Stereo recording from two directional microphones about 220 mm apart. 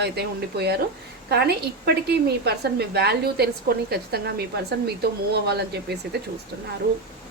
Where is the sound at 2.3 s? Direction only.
45° right (ahead or behind).